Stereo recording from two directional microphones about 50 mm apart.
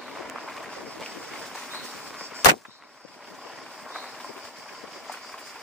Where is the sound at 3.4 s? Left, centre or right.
Centre.